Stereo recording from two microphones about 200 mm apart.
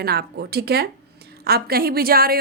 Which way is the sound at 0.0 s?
50° right (ahead or behind).